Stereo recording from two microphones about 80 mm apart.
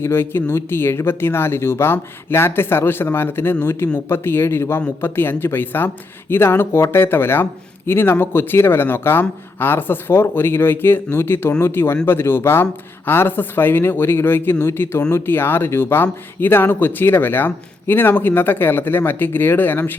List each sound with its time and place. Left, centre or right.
0.0 s speech: left